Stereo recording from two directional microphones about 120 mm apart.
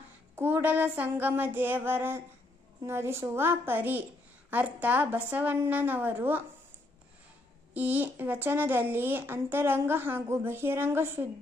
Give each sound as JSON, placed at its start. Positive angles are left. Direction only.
{"t": 0.4, "sound": "a woman's voice", "side_deg": -15}
{"t": 7.7, "sound": "speech", "side_deg": -15}